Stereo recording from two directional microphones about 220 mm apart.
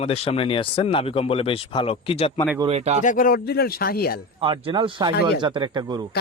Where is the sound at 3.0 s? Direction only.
35° left (ahead or behind).